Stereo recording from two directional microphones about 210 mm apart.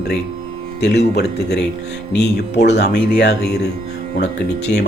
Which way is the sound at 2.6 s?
55° left (ahead or behind).